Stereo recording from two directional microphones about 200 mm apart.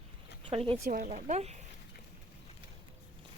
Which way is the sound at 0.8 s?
40° right (ahead or behind).